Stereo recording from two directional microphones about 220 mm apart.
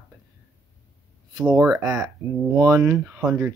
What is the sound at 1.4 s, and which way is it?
Speech, 5° right (ahead or behind).